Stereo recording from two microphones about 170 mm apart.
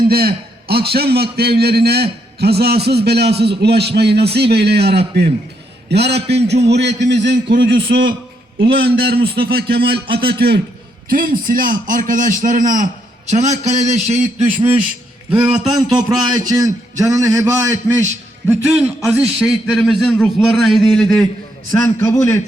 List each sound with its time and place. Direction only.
0.1 s a man's voice: 65° right (ahead or behind)
6.7 s a man's voice: 90° right
7.7 s a man's voice: 75° right (ahead or behind)
11.1 s a man's voice: 55° right (ahead or behind); by 14.8 s 35° right (ahead or behind)
15.3 s speech: 10° right (ahead or behind)
15.7 s a man's voice: 25° right (ahead or behind); by 21.2 s 5° left (ahead or behind)
21.7 s a man's voice: 20° left (ahead or behind)